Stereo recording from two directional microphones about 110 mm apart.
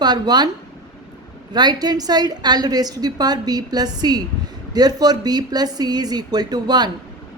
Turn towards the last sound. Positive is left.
turn(degrees=-40)  # may be behind; listen again after turning